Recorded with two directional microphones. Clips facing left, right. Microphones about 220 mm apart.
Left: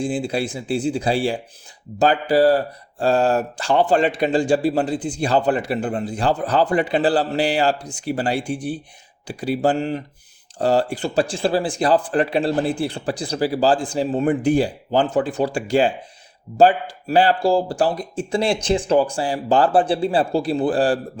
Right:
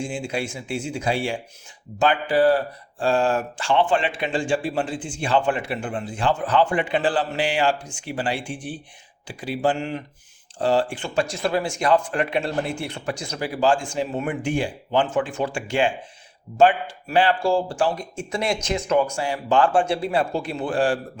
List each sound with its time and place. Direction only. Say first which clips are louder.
0.0 s speech: left 5 dB; 35° left (ahead or behind)